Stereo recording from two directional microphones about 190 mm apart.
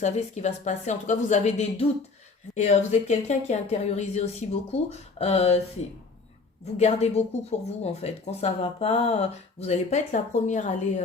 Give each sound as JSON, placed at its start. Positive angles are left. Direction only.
{"t": 0.0, "sound": "speech", "side_deg": 35}
{"t": 6.7, "sound": "speech", "side_deg": 35}